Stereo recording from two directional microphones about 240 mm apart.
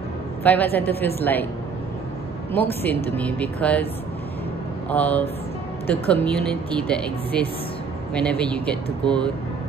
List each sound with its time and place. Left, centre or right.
0.4 s a woman's voice: centre
2.5 s speech: centre
4.8 s speech: centre